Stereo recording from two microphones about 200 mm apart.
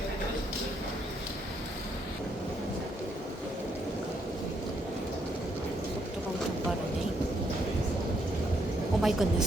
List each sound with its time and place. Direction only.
9.0 s a woman's voice: centre (ahead or behind)